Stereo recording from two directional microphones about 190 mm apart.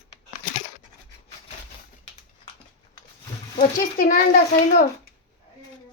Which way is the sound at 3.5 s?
45° left (ahead or behind).